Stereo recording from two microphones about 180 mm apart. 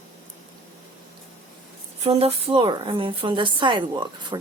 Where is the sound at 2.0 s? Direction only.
35° right (ahead or behind).